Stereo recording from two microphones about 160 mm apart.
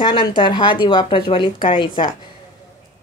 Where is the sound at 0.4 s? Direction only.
30° left (ahead or behind).